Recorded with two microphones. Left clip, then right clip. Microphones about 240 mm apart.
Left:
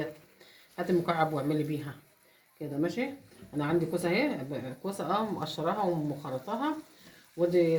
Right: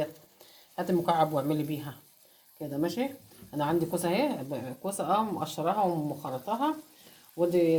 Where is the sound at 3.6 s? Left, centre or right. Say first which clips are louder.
Right 1 dB; right.